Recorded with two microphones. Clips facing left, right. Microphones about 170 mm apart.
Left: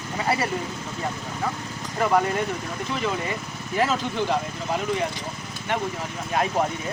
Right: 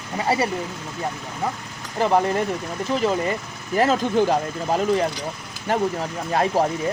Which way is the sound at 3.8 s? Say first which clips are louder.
Right 5 dB; 40° right (ahead or behind).